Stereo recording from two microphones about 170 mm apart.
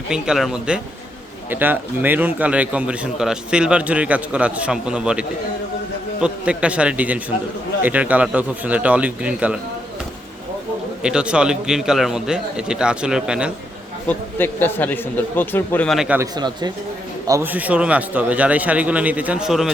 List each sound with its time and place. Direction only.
0.1 s a man's voice: centre (ahead or behind)
6.2 s a man's voice: 5° right (ahead or behind)
11.0 s a man's voice: 5° right (ahead or behind)
14.1 s a man's voice: 10° left (ahead or behind)
16.2 s a man's voice: 25° right (ahead or behind); by 19.7 s 5° right (ahead or behind)